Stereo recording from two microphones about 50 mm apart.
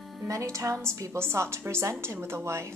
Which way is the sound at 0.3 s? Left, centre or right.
Right.